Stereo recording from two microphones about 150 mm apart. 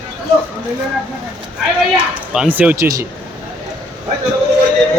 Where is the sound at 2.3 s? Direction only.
5° right (ahead or behind).